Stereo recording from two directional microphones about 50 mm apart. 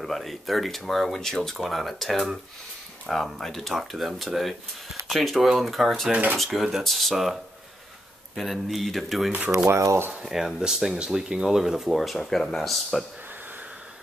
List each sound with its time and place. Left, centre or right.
0.0 s speech: centre
8.4 s speech: centre
9.7 s speech: right
10.2 s speech: centre